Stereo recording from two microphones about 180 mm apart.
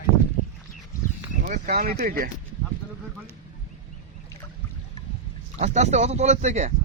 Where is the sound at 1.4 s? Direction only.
45° right (ahead or behind).